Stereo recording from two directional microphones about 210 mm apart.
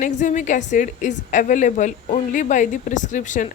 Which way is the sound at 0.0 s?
35° left (ahead or behind).